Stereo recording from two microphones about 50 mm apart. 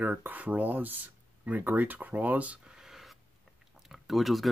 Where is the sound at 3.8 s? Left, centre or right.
Centre.